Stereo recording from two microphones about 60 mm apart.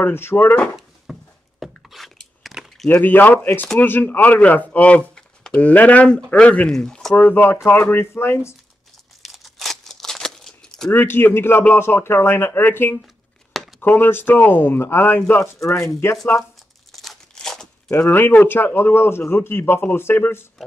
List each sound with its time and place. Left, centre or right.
0.1 s speech: left
1.1 s a sound: centre
1.9 s biting: centre
2.4 s a sound: centre
2.9 s speech: left
6.7 s speech: centre
7.2 s speech: left
9.2 s a sound: centre
10.9 s speech: left
13.0 s a sound: centre
13.7 s speech: left
16.9 s crumpling: centre
17.8 s speech: left